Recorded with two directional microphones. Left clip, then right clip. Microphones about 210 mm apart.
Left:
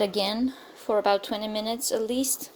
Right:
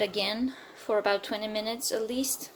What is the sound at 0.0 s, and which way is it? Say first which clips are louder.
A woman's voice: left 3 dB; 25° left (ahead or behind).